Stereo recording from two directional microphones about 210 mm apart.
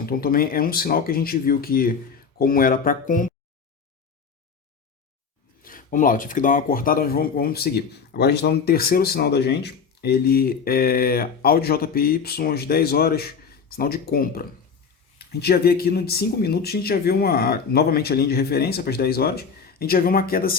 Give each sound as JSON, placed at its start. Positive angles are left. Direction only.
{"t": 0.0, "sound": "speech", "side_deg": 45}
{"t": 5.6, "sound": "speech", "side_deg": 40}